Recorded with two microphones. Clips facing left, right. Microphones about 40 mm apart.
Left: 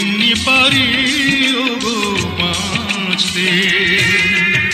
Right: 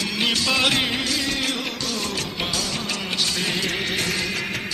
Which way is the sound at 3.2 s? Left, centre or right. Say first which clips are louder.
Left 9 dB; left.